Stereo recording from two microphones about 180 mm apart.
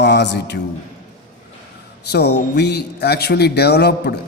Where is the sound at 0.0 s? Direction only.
70° left (ahead or behind).